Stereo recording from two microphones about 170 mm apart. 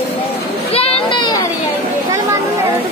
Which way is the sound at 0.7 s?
35° left (ahead or behind).